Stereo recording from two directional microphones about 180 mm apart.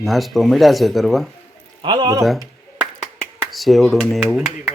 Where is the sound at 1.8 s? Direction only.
25° right (ahead or behind).